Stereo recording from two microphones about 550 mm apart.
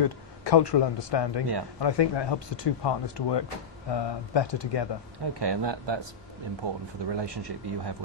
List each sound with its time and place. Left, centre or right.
0.0 s a man's voice: left
5.4 s speech: right